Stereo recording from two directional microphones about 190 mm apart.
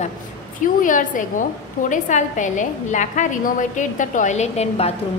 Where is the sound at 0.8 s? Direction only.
45° left (ahead or behind).